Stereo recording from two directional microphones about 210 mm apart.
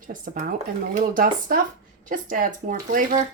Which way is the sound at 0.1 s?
45° right (ahead or behind).